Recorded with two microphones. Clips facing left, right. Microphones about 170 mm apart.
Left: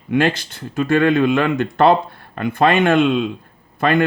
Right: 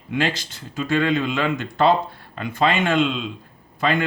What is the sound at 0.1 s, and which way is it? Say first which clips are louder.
Speech: left 6 dB; 55° left (ahead or behind).